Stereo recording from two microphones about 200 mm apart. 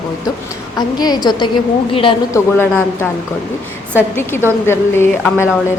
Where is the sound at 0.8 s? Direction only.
20° left (ahead or behind).